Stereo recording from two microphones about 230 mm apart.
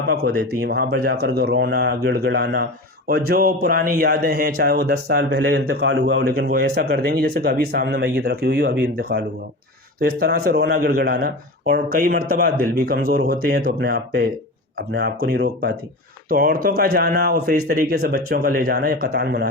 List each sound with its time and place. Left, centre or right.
0.1 s a man's voice: right